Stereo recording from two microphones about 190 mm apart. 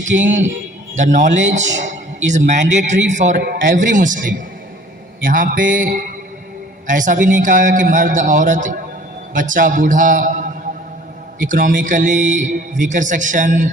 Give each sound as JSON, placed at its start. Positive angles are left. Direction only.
{"t": 0.1, "sound": "a man's voice", "side_deg": -75}
{"t": 0.9, "sound": "a man's voice", "side_deg": -40}